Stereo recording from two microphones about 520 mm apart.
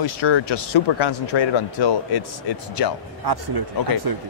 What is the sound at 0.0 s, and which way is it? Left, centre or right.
Speech, left.